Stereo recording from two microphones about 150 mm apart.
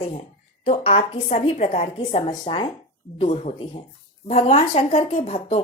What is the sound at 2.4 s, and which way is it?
Speech, 30° left (ahead or behind).